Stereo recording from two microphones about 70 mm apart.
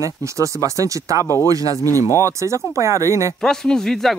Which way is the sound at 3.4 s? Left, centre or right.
Centre.